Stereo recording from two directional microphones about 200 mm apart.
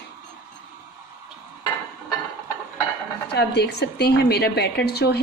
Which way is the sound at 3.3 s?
55° left (ahead or behind).